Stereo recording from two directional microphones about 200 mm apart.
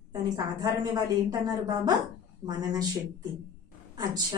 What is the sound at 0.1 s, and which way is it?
Speech, 20° right (ahead or behind).